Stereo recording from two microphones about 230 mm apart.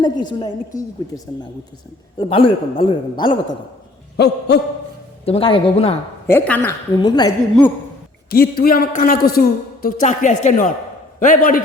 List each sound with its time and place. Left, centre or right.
0.0 s a woman's voice: centre
2.1 s a man's voice: left
4.2 s a sound: left
5.2 s a man's voice: left
6.2 s a woman's voice: centre
8.3 s a woman's voice: left